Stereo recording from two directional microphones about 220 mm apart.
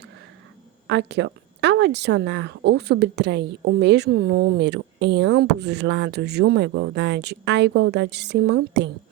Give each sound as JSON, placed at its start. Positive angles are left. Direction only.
{"t": 0.9, "sound": "speech", "side_deg": -50}